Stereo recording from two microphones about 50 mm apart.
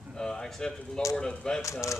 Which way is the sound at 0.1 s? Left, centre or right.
Centre.